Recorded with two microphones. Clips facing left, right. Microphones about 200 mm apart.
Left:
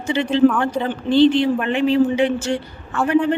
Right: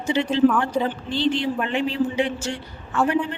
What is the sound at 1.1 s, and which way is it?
A man's voice, 60° left (ahead or behind).